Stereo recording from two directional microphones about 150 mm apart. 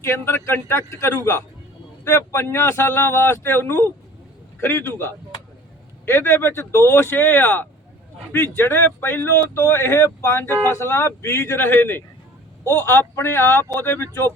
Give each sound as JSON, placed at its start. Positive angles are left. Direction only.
{"t": 0.0, "sound": "speech", "side_deg": 15}